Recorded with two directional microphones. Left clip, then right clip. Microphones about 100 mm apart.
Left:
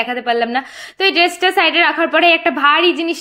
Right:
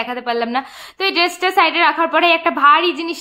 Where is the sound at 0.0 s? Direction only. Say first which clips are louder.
Left 3 dB; 15° left (ahead or behind).